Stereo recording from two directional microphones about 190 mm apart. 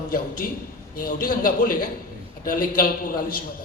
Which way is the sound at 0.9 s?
50° left (ahead or behind).